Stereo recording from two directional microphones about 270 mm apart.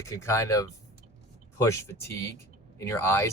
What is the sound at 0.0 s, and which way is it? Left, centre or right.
Speech, centre.